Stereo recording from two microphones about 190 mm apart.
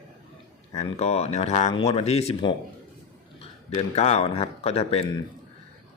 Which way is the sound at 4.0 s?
35° left (ahead or behind).